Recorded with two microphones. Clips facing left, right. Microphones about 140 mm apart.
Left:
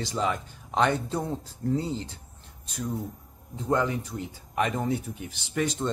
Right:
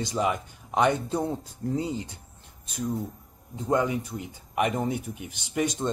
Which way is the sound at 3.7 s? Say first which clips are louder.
Right 1 dB; 15° right (ahead or behind).